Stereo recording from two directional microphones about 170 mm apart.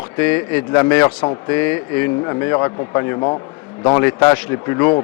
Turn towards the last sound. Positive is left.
turn(degrees=15)  # may be behind; listen again after turning